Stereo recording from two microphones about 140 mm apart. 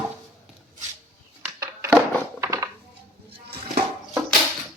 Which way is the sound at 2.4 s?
20° right (ahead or behind).